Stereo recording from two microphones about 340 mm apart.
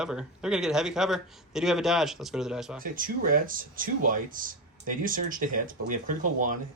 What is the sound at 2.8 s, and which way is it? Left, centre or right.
Speech, right.